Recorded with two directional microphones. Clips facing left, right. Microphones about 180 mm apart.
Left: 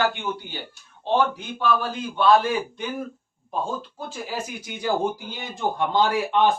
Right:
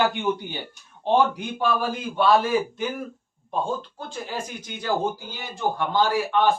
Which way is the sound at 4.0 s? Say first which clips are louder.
Left 1 dB; 5° left (ahead or behind).